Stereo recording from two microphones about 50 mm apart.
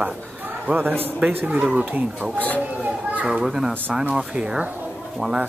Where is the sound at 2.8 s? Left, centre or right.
Right.